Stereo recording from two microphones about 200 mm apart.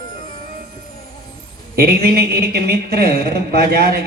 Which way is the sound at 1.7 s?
50° right (ahead or behind).